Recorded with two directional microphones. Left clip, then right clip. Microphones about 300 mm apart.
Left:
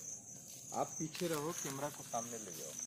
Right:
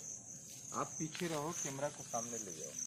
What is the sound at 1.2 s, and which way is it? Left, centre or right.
Speech, left.